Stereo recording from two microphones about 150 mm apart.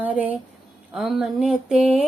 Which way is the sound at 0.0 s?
10° right (ahead or behind).